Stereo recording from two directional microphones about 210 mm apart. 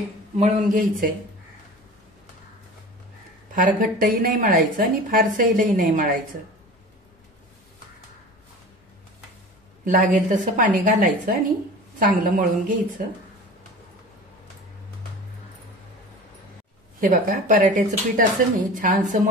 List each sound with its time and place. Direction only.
0.4 s a woman's voice: 40° right (ahead or behind)
3.5 s a woman's voice: 40° right (ahead or behind)
9.8 s a woman's voice: 40° right (ahead or behind)
17.0 s a woman's voice: 40° right (ahead or behind)